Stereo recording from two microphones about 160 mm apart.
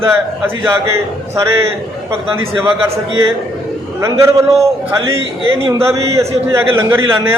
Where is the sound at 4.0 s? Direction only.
20° right (ahead or behind).